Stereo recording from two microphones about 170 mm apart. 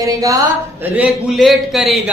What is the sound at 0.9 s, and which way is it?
A man's voice, 5° right (ahead or behind).